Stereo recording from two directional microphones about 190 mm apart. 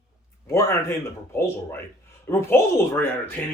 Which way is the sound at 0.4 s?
15° left (ahead or behind).